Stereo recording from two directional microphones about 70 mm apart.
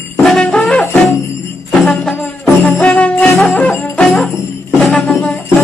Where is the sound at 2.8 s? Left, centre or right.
Left.